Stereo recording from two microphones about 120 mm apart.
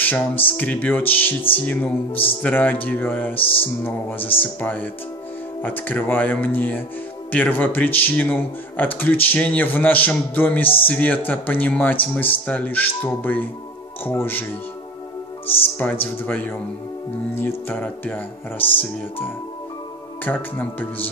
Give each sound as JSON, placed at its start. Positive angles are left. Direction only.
{"t": 0.5, "sound": "speech", "side_deg": 15}
{"t": 15.4, "sound": "speech", "side_deg": 15}